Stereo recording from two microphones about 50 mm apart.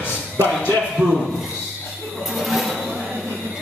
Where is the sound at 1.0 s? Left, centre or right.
Right.